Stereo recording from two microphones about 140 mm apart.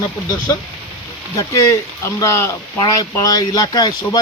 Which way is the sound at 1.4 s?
20° left (ahead or behind).